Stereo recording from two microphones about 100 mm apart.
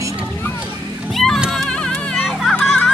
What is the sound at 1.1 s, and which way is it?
Children playing, centre (ahead or behind).